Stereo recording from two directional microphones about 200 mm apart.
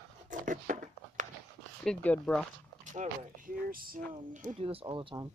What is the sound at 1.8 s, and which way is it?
Speech, 5° left (ahead or behind).